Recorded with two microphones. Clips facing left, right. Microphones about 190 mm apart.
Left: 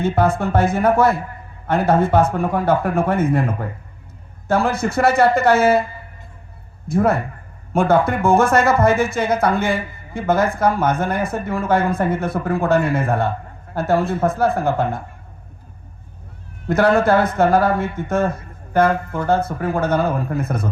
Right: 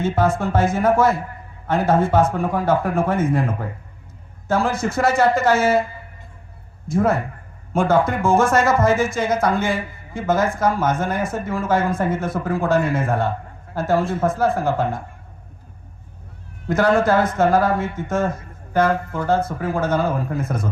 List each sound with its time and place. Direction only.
0.0 s speech: 60° left (ahead or behind)
6.8 s speech: 60° left (ahead or behind)
16.6 s speech: 60° left (ahead or behind)